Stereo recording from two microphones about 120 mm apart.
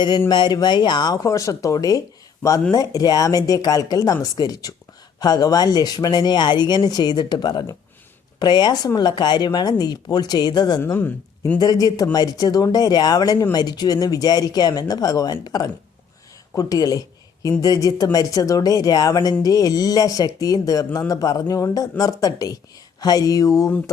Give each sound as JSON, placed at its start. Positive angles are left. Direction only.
{"t": 0.3, "sound": "speech", "side_deg": 35}
{"t": 10.9, "sound": "speech", "side_deg": 15}
{"t": 11.6, "sound": "speech", "side_deg": 30}